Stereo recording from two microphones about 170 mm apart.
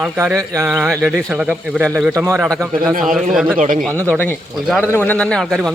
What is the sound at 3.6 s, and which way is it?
Speech, 50° right (ahead or behind).